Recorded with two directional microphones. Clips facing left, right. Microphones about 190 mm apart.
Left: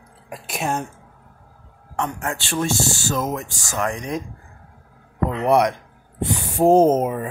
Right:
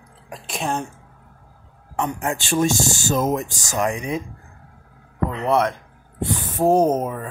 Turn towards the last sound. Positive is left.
turn(degrees=15)  # may be behind; listen again after turning